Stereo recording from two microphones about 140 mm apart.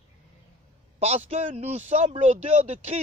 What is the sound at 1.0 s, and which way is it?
A man's voice, 50° right (ahead or behind).